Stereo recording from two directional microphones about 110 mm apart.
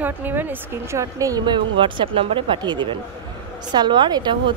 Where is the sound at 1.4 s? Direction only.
50° right (ahead or behind).